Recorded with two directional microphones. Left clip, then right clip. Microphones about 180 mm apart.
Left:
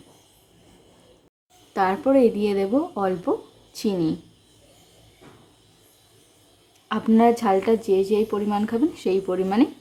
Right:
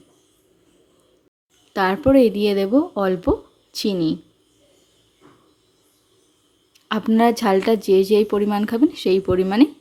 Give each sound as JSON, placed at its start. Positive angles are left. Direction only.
{"t": 1.7, "sound": "a woman's voice", "side_deg": -30}
{"t": 6.8, "sound": "speech", "side_deg": -30}